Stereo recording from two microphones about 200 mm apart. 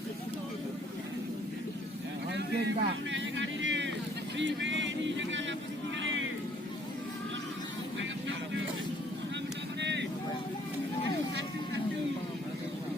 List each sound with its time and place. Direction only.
2.3 s vehicle: 60° right (ahead or behind)
4.4 s a sound: 65° right (ahead or behind)
9.8 s vehicle: 60° right (ahead or behind)